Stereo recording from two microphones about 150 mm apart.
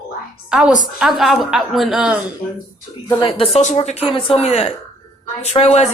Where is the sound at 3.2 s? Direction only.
35° left (ahead or behind).